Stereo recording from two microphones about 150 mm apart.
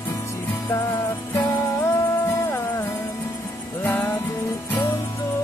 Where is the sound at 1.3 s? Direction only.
20° left (ahead or behind).